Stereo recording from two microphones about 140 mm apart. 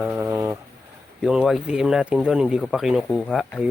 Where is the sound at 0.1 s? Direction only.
20° right (ahead or behind).